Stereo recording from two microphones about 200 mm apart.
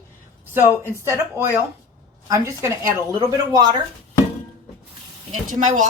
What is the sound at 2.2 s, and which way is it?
Speech, 15° right (ahead or behind).